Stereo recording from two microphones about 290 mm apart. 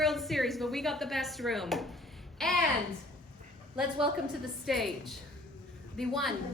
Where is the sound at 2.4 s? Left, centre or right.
Centre.